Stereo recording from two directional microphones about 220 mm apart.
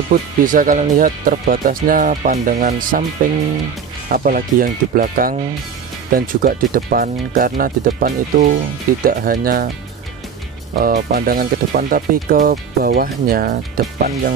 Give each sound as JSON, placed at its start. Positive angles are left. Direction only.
{"t": 0.4, "sound": "speech", "side_deg": -40}
{"t": 4.1, "sound": "speech", "side_deg": -40}
{"t": 10.8, "sound": "speech", "side_deg": -45}